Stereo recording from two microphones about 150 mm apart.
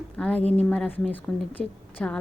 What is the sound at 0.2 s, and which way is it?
A woman's voice, 5° left (ahead or behind).